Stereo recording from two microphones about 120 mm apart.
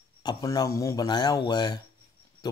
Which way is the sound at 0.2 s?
35° left (ahead or behind).